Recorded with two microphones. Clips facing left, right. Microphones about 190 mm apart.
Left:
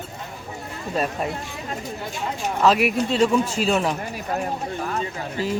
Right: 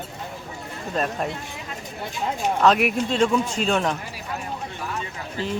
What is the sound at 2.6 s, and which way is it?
A man's voice, centre (ahead or behind).